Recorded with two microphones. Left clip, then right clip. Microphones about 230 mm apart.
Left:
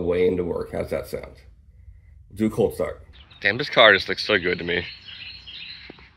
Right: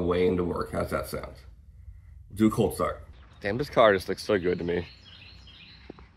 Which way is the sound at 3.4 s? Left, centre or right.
Centre.